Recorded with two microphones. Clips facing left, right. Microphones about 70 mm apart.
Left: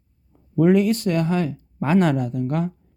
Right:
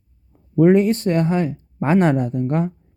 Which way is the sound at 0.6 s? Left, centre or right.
Right.